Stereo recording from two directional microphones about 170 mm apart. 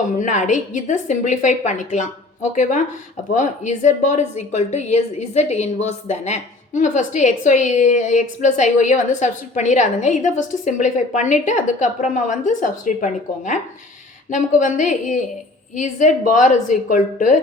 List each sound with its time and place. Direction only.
0.2 s a woman's voice: 45° left (ahead or behind)